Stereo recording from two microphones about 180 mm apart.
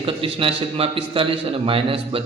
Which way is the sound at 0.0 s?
30° right (ahead or behind).